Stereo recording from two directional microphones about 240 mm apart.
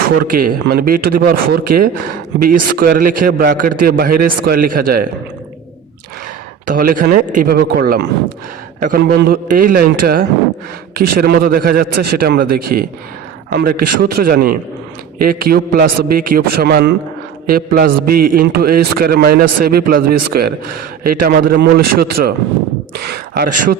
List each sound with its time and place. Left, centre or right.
0.3 s a man's voice: right
6.7 s a man's voice: right
23.0 s a man's voice: right